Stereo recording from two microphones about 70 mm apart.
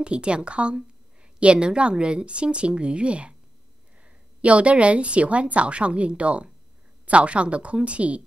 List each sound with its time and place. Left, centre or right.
0.0 s a woman's voice: centre